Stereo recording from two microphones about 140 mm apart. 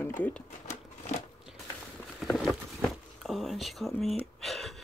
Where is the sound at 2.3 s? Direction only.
Centre (ahead or behind).